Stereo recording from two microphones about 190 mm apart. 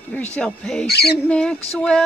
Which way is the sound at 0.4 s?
5° left (ahead or behind).